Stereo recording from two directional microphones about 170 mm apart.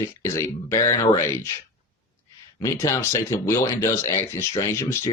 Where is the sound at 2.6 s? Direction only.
20° left (ahead or behind).